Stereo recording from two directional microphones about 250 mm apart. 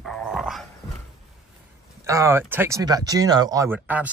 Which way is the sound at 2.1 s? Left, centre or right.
Centre.